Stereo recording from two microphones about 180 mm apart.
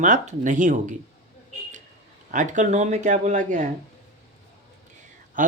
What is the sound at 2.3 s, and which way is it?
Speech, 45° right (ahead or behind).